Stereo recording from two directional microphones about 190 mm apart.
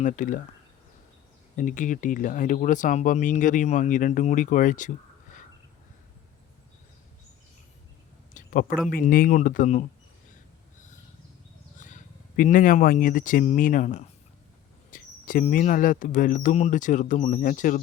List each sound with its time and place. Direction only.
0.0 s speech: 40° left (ahead or behind)
1.5 s speech: 45° left (ahead or behind)
8.3 s a sound: 45° left (ahead or behind)
8.9 s speech: 50° left (ahead or behind)
11.8 s speech: 40° left (ahead or behind)